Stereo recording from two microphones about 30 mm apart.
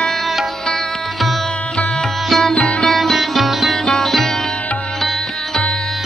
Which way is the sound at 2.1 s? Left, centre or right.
Centre.